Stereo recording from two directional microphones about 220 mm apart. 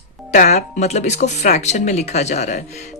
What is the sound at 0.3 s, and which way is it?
Speech, 30° left (ahead or behind).